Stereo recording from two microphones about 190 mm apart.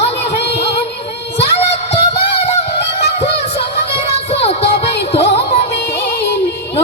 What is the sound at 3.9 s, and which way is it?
Music, 30° left (ahead or behind).